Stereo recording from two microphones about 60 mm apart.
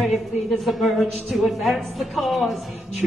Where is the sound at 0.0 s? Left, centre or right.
Centre.